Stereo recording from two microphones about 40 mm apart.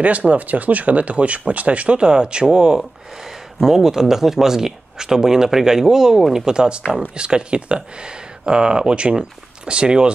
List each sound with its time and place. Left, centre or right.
0.0 s speech: right; by 2.8 s centre
2.8 s speech: centre; by 10.1 s right